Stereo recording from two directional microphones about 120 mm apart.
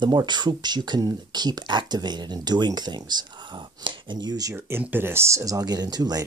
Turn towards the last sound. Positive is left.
turn(degrees=-35)  # may be behind; listen again after turning